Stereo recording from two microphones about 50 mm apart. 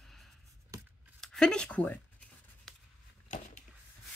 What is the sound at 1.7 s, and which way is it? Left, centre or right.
Speech, left.